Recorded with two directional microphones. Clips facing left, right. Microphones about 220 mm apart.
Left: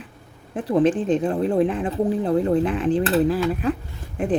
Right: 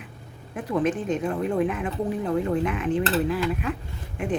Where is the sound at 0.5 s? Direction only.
30° left (ahead or behind).